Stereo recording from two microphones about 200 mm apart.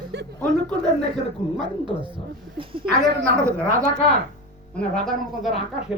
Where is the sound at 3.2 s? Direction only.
15° right (ahead or behind).